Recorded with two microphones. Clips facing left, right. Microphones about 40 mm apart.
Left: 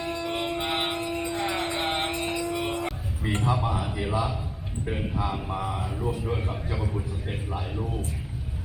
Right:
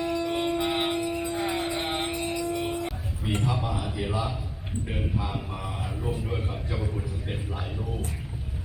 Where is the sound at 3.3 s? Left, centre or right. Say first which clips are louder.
Left 2 dB; left.